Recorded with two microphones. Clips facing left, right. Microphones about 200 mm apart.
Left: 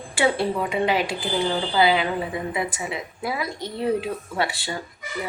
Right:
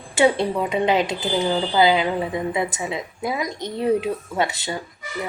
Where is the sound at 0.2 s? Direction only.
20° right (ahead or behind).